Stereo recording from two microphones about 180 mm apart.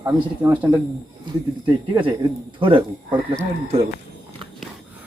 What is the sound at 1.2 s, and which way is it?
Speech, 25° right (ahead or behind).